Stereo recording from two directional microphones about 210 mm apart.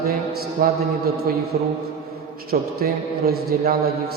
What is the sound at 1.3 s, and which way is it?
Speech, 45° right (ahead or behind).